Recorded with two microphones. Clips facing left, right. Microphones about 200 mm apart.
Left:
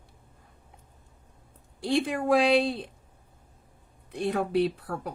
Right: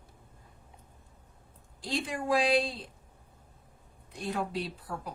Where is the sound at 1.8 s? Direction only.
65° left (ahead or behind).